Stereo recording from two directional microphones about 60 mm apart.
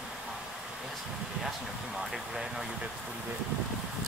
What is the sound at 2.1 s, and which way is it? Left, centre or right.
Vehicle, centre.